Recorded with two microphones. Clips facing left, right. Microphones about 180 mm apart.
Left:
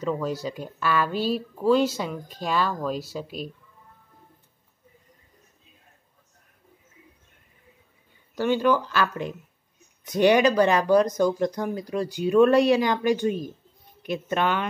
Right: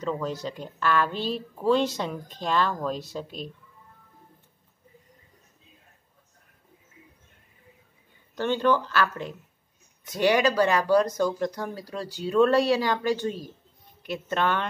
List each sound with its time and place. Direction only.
0.0 s speech: 10° left (ahead or behind)
8.4 s speech: 10° left (ahead or behind)